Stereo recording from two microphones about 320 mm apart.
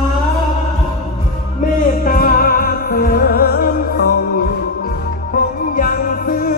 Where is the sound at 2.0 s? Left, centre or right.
Left.